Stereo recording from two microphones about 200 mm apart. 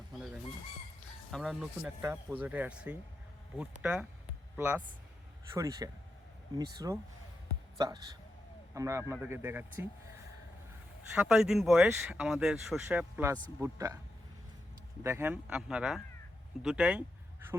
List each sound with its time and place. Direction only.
1.3 s speech: centre (ahead or behind)
11.1 s speech: 5° right (ahead or behind)
15.0 s speech: 10° right (ahead or behind)